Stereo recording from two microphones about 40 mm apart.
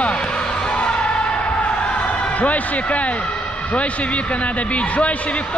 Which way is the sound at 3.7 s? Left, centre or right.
Left.